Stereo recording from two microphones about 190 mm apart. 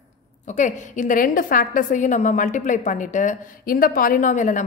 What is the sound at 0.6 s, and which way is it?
A woman's voice, 40° left (ahead or behind).